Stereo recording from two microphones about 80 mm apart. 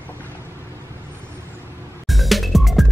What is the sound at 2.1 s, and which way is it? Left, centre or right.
Music, centre.